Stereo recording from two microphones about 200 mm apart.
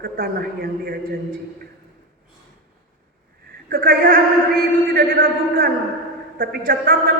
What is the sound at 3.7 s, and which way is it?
Speech, 45° right (ahead or behind).